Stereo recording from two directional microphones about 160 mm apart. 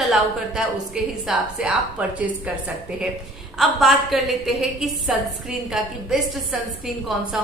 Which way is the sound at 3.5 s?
Centre (ahead or behind).